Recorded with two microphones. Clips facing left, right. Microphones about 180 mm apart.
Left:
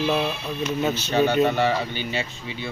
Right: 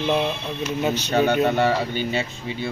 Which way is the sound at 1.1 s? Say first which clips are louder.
Even; 55° right (ahead or behind).